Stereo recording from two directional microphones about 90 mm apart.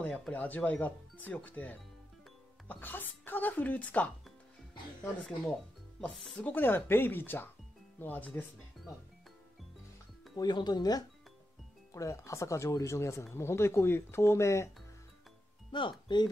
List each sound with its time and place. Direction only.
0.3 s speech: 20° left (ahead or behind)
5.5 s speech: 5° left (ahead or behind)
6.4 s speech: 25° left (ahead or behind)
10.3 s speech: 50° left (ahead or behind)
11.9 s speech: 35° left (ahead or behind)
15.7 s speech: 60° left (ahead or behind)